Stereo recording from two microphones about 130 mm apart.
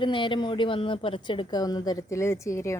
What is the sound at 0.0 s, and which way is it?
A woman's voice, 40° left (ahead or behind).